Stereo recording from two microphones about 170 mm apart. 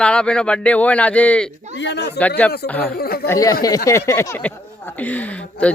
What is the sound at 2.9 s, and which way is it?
Speech, 65° left (ahead or behind).